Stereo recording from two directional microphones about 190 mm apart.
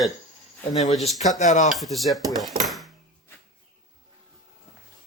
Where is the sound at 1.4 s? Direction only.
40° left (ahead or behind).